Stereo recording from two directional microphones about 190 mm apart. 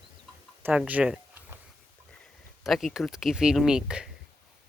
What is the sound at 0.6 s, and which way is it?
Speech, 5° right (ahead or behind).